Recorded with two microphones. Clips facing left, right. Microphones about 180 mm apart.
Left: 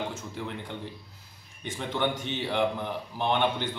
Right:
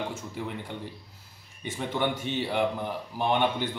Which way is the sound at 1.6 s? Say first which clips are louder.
Even; 5° right (ahead or behind).